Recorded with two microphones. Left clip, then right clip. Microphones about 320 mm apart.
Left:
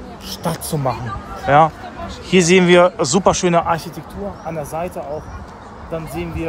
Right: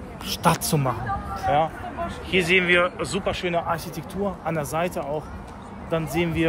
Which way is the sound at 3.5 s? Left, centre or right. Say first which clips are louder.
Left 9 dB; left.